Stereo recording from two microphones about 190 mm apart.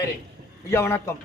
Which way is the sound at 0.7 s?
15° left (ahead or behind).